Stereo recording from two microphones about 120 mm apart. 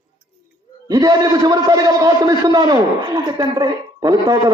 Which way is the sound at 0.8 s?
30° right (ahead or behind).